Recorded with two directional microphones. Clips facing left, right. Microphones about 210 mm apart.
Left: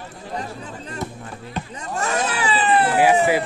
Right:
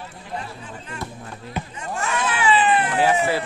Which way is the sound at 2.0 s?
40° left (ahead or behind).